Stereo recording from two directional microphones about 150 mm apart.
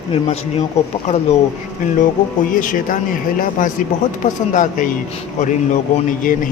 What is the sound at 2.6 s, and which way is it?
Speech, 65° left (ahead or behind).